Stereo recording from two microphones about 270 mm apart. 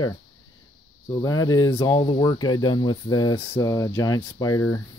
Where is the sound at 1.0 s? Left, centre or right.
Centre.